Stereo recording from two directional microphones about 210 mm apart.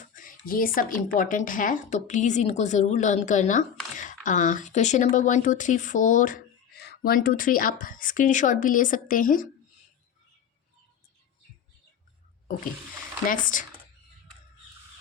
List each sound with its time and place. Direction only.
0.0 s speech: 40° left (ahead or behind)
13.2 s speech: 40° left (ahead or behind)